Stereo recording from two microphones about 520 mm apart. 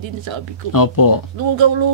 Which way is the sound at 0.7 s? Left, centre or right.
Left.